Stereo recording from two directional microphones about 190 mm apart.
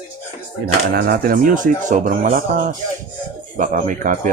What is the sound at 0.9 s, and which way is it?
Speech, 50° right (ahead or behind).